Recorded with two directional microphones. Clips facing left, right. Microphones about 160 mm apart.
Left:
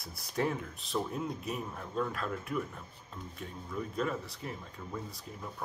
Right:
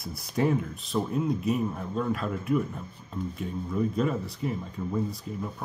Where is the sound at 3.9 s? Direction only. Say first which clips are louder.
Right 7 dB; 15° right (ahead or behind).